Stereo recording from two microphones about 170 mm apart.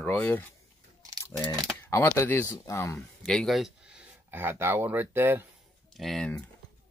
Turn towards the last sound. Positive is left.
turn(degrees=5)  # may be behind; listen again after turning